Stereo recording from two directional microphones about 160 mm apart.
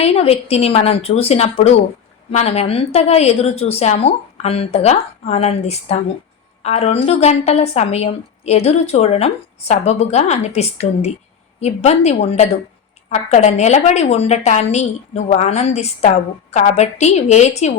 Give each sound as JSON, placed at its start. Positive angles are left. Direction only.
{"t": 0.0, "sound": "a woman's voice", "side_deg": 40}